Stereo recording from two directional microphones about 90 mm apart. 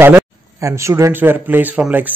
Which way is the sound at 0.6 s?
35° right (ahead or behind).